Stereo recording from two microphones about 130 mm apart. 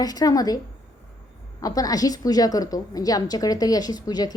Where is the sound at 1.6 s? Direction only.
25° left (ahead or behind).